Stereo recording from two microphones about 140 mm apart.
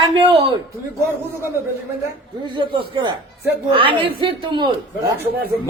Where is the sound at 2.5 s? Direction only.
35° right (ahead or behind).